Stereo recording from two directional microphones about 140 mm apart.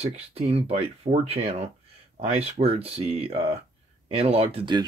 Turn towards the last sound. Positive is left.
turn(degrees=-45)  # may be behind; listen again after turning